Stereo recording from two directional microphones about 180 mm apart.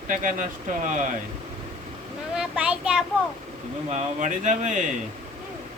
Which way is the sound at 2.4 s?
5° right (ahead or behind).